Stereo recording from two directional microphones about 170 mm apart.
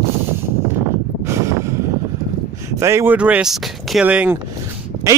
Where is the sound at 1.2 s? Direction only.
15° right (ahead or behind).